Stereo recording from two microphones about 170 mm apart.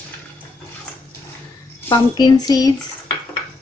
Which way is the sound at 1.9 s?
25° left (ahead or behind).